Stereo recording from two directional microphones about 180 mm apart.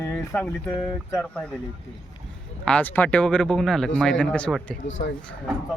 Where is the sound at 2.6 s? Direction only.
10° left (ahead or behind).